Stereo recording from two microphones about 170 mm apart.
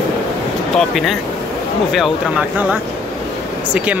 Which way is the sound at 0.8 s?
Centre (ahead or behind).